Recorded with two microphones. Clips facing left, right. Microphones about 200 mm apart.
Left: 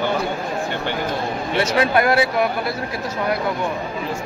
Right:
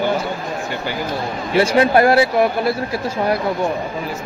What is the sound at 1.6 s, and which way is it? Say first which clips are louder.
Speech: right 5 dB; 30° right (ahead or behind).